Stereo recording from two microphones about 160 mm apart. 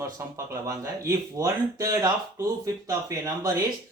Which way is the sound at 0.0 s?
20° right (ahead or behind).